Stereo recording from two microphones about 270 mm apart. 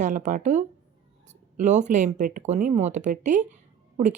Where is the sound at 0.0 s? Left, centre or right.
Right.